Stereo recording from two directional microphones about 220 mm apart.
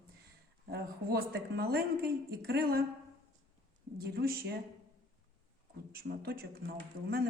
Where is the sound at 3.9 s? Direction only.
45° right (ahead or behind).